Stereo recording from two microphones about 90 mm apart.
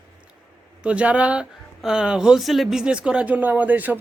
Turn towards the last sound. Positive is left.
turn(degrees=-20)  # may be behind; listen again after turning